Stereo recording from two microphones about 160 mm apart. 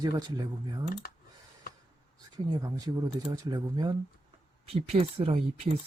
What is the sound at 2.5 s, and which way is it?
Speech, 25° right (ahead or behind).